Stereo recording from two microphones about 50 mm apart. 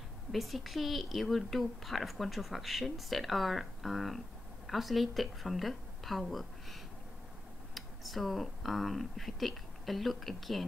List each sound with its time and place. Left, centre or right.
0.3 s a woman's voice: centre